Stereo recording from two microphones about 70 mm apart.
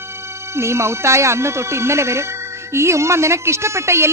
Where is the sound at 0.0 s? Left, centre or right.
Right.